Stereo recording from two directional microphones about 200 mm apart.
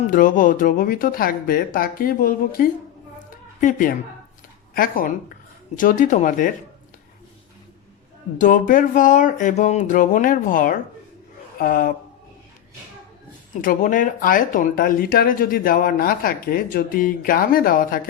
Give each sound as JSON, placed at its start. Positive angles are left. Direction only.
{"t": 0.1, "sound": "speech", "side_deg": 40}
{"t": 3.2, "sound": "a sound", "side_deg": 40}
{"t": 4.7, "sound": "speech", "side_deg": 45}
{"t": 8.4, "sound": "speech", "side_deg": 40}
{"t": 13.6, "sound": "speech", "side_deg": 40}